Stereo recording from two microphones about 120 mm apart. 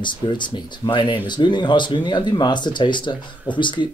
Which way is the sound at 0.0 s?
40° left (ahead or behind).